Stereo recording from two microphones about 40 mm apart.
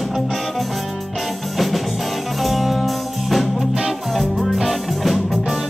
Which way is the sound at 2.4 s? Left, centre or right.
Centre.